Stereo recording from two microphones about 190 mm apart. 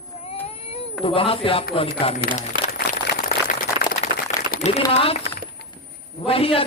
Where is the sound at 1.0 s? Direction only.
30° left (ahead or behind).